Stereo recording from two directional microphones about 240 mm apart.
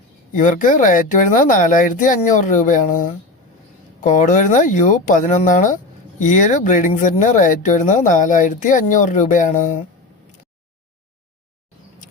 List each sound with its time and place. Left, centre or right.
0.3 s speech: left